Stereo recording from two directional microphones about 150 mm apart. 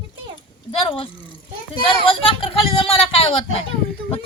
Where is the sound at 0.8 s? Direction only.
35° left (ahead or behind).